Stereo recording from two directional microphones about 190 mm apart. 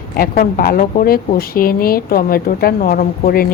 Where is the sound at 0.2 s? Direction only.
50° left (ahead or behind).